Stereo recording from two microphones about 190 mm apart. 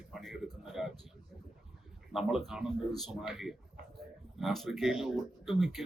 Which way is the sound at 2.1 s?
Centre (ahead or behind).